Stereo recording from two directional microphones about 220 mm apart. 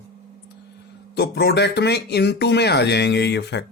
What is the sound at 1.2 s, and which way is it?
Speech, 50° left (ahead or behind).